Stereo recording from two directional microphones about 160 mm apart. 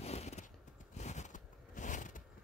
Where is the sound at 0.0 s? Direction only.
45° left (ahead or behind).